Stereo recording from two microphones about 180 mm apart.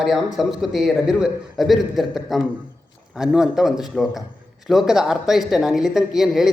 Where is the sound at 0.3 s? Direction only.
Centre (ahead or behind).